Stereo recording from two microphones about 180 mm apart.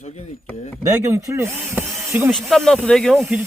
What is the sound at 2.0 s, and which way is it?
Speech, 15° right (ahead or behind).